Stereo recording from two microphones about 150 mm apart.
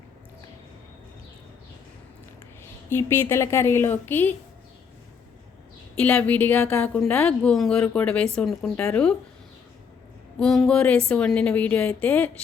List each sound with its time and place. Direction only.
2.9 s a woman's voice: 15° left (ahead or behind)
6.0 s a woman's voice: 5° left (ahead or behind)
10.4 s a sound: 5° left (ahead or behind)
11.1 s a woman's voice: 5° left (ahead or behind)